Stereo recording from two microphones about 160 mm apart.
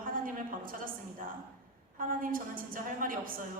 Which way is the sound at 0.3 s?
60° right (ahead or behind).